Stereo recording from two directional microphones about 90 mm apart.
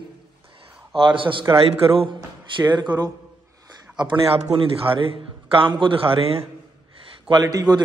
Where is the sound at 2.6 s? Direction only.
55° right (ahead or behind).